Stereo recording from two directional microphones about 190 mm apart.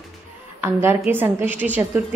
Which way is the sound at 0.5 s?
10° right (ahead or behind).